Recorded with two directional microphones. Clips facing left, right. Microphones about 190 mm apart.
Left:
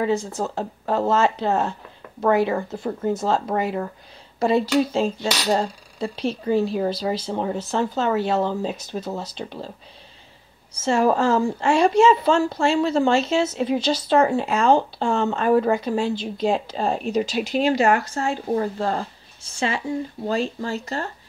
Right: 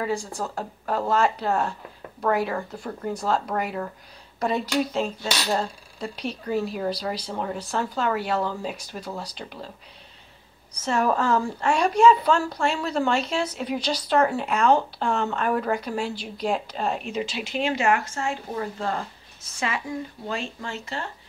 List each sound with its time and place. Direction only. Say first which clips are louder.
0.0 s speech: left 5 dB; 20° left (ahead or behind)
10.7 s speech: left 4 dB; 25° left (ahead or behind)